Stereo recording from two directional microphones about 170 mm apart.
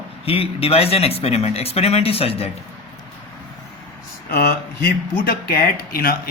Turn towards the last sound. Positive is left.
turn(degrees=60)  # may be behind; listen again after turning